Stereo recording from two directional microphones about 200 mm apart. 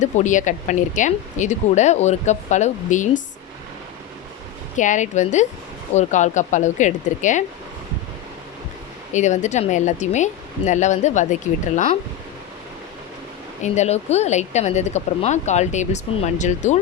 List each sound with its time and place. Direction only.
0.0 s speech: 40° left (ahead or behind)
4.8 s speech: 40° left (ahead or behind)
9.1 s speech: 35° left (ahead or behind)
13.6 s speech: 35° left (ahead or behind)